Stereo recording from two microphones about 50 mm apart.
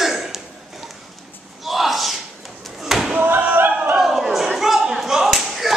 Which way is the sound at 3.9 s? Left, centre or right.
Centre.